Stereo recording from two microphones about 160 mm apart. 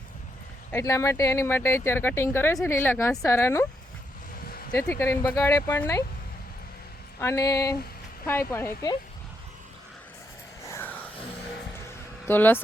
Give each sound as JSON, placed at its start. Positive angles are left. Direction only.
{"t": 0.7, "sound": "speech", "side_deg": 20}
{"t": 4.8, "sound": "speech", "side_deg": 15}
{"t": 7.2, "sound": "speech", "side_deg": 20}
{"t": 10.7, "sound": "vehicle", "side_deg": 15}
{"t": 12.3, "sound": "speech", "side_deg": 10}